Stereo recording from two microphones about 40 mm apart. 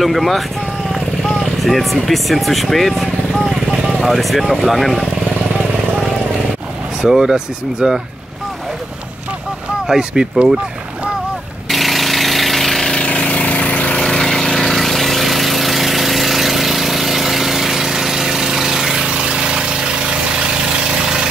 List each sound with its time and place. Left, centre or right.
0.0 s speech: centre
7.0 s speech: centre
9.8 s speech: centre
11.7 s engine: centre
13.0 s a sound: left
13.9 s vehicle: centre
14.6 s engine: centre
19.0 s engine: right
21.0 s vehicle: centre